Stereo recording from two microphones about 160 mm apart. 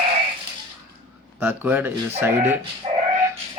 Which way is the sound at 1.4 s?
10° right (ahead or behind).